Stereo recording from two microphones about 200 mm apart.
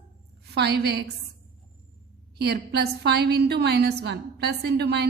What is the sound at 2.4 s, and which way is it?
A woman's voice, 55° right (ahead or behind).